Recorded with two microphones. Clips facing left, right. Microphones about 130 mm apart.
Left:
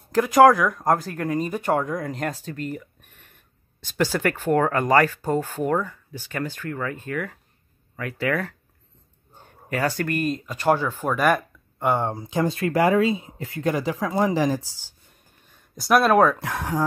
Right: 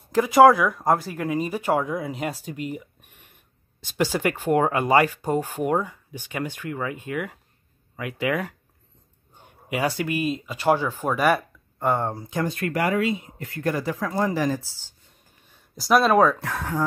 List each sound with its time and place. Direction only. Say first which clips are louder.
0.1 s speech: even; 5° right (ahead or behind)
11.8 s speech: left 1 dB; 5° left (ahead or behind)
12.1 s speech: left 3 dB; 20° left (ahead or behind)
15.7 s speech: left 1 dB; centre (ahead or behind)
16.3 s speech: left 1 dB; 15° left (ahead or behind)